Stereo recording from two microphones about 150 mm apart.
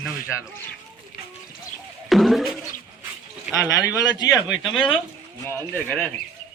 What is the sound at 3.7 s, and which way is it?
Speech, 20° left (ahead or behind).